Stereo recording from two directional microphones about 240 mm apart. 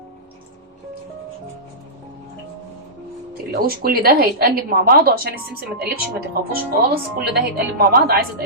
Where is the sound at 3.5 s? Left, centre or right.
Right.